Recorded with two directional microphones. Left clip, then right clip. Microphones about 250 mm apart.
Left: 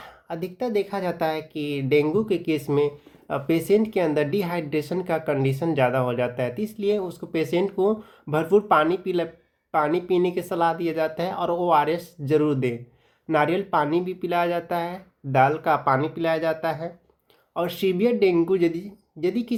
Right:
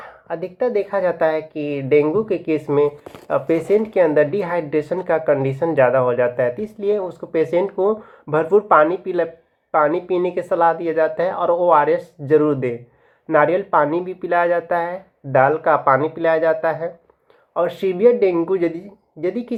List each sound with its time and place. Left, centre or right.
0.4 s speech: left